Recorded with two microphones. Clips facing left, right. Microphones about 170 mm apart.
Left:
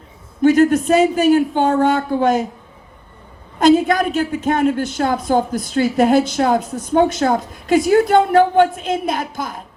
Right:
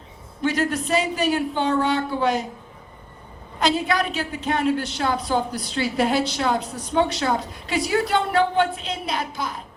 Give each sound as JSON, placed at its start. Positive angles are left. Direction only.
{"t": 0.4, "sound": "a woman's voice", "side_deg": 45}
{"t": 3.6, "sound": "a woman's voice", "side_deg": 50}